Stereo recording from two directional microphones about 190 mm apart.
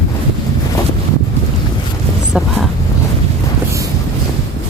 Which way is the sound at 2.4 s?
5° right (ahead or behind).